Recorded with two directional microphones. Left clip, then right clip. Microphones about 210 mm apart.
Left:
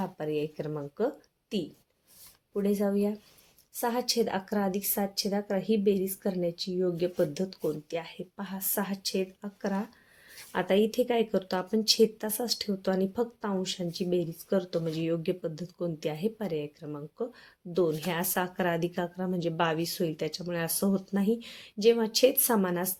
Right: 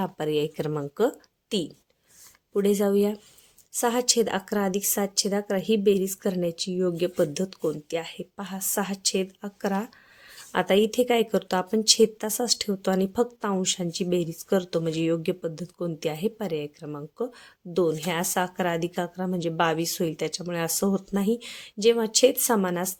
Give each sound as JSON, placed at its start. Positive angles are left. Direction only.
{"t": 0.0, "sound": "a woman's voice", "side_deg": -40}